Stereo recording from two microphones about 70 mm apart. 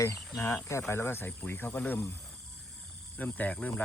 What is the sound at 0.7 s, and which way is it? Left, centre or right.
Speech, left.